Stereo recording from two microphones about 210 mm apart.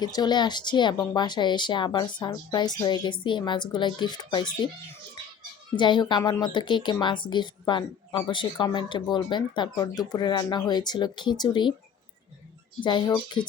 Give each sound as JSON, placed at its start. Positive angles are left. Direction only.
{"t": 0.0, "sound": "speech", "side_deg": 20}
{"t": 5.7, "sound": "speech", "side_deg": 20}
{"t": 12.8, "sound": "speech", "side_deg": 20}